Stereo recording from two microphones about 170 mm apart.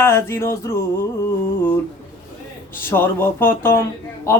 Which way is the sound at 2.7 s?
10° left (ahead or behind).